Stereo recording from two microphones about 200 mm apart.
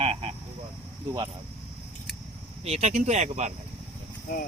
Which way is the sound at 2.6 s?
30° right (ahead or behind).